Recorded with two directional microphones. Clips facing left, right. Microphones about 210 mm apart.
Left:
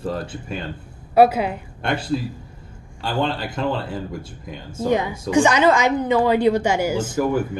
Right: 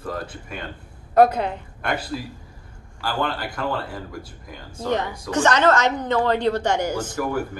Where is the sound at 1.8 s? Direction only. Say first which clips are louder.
Left 4 dB; 25° left (ahead or behind).